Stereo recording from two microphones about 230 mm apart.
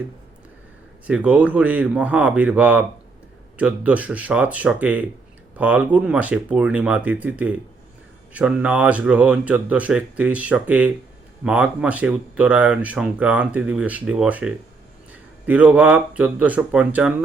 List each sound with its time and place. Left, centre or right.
1.0 s speech: centre